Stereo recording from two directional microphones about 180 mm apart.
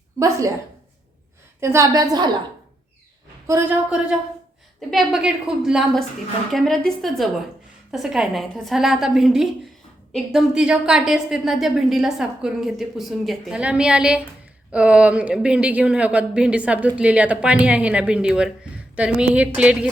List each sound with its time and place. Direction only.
0.2 s speech: 15° right (ahead or behind)
1.6 s a woman's voice: 15° right (ahead or behind)
3.8 s a woman's voice: 5° right (ahead or behind)